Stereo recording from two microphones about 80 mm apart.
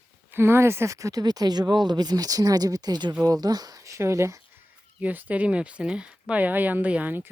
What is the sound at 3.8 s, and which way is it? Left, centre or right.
Speech, right.